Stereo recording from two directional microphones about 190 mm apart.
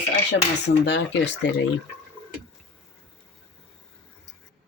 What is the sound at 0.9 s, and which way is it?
Speech, 65° left (ahead or behind).